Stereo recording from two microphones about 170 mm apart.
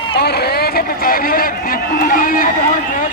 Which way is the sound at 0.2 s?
70° left (ahead or behind).